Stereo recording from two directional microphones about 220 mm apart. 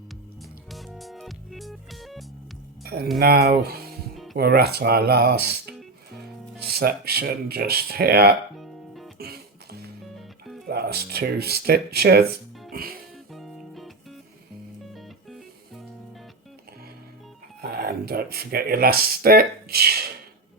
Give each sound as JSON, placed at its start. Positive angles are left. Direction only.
{"t": 0.7, "sound": "music", "side_deg": 0}
{"t": 2.8, "sound": "speech", "side_deg": -45}
{"t": 6.7, "sound": "speech", "side_deg": -45}
{"t": 8.5, "sound": "music", "side_deg": 0}
{"t": 9.1, "sound": "music", "side_deg": -45}
{"t": 10.7, "sound": "speech", "side_deg": -45}
{"t": 12.7, "sound": "music", "side_deg": -45}
{"t": 13.3, "sound": "music", "side_deg": 0}
{"t": 17.6, "sound": "speech", "side_deg": -45}